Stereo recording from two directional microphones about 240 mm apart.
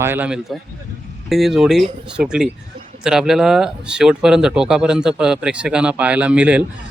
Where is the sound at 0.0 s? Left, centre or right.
Centre.